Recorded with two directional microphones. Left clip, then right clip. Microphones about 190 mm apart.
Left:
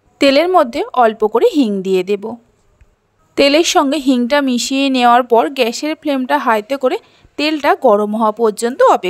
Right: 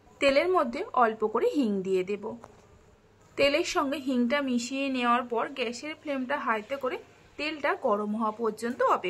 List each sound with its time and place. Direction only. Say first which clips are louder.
0.2 s a woman's voice: left 13 dB; 45° left (ahead or behind)
3.3 s a woman's voice: left 14 dB; 45° left (ahead or behind)